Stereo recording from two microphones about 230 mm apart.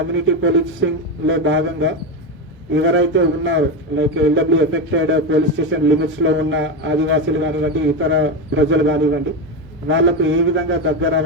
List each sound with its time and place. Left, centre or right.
0.1 s a man's voice: right